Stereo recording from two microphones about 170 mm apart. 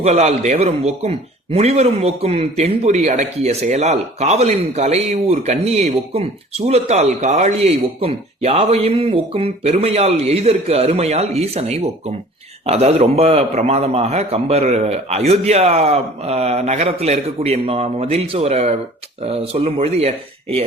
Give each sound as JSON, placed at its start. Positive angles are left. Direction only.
{"t": 0.0, "sound": "a man's voice", "side_deg": -40}